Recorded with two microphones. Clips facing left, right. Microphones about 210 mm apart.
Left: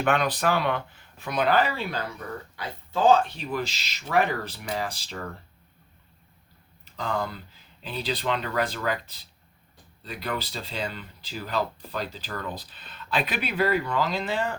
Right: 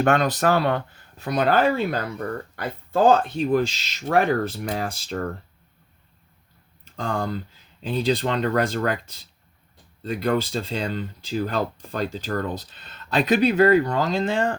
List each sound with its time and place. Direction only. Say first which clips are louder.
0.0 s speech: right 4 dB; 45° right (ahead or behind)
6.9 s speech: right 3 dB; 45° right (ahead or behind)